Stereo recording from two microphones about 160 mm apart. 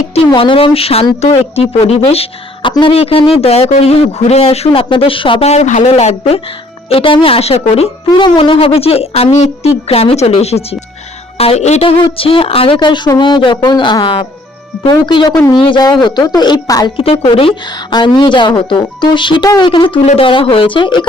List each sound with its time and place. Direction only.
0.3 s a woman's voice: 30° left (ahead or behind)
17.0 s a woman's voice: 35° left (ahead or behind)